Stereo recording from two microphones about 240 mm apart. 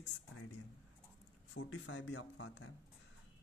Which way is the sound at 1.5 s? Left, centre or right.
Left.